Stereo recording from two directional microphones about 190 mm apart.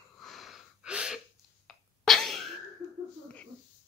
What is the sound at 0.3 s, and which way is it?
Gasp, 5° right (ahead or behind).